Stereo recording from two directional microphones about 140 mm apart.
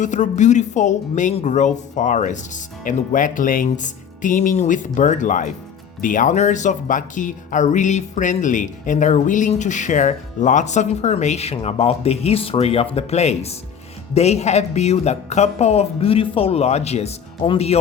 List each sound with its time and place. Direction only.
0.0 s speech: 60° left (ahead or behind)